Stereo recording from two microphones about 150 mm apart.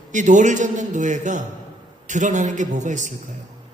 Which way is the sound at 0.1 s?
55° right (ahead or behind).